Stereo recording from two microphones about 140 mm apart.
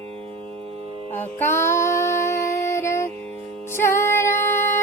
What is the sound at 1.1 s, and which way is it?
Music, 15° left (ahead or behind).